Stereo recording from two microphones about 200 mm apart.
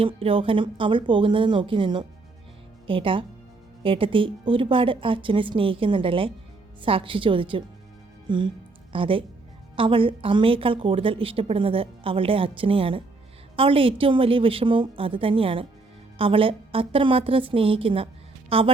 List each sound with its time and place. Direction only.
0.0 s a woman's voice: 25° right (ahead or behind)